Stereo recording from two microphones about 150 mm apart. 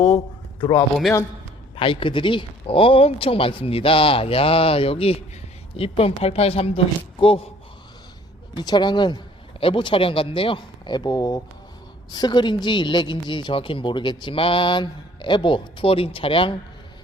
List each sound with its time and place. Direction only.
0.6 s a woman's voice: 30° left (ahead or behind)
8.5 s a woman's voice: 30° left (ahead or behind)